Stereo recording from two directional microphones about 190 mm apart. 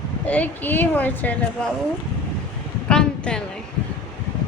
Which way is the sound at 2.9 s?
5° left (ahead or behind).